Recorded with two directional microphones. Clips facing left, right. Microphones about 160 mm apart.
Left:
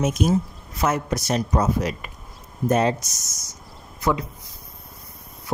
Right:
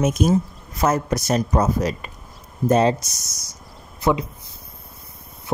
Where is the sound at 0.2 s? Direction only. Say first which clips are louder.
Right 2 dB; 45° right (ahead or behind).